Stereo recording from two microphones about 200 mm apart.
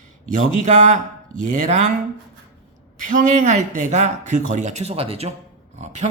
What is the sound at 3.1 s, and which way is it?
Speech, 40° right (ahead or behind).